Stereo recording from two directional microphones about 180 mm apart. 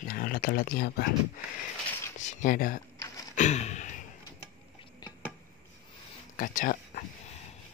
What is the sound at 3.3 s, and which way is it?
Gasp, 40° left (ahead or behind).